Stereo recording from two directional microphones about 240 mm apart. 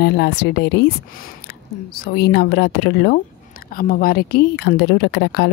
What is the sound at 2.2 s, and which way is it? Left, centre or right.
A woman's voice, left.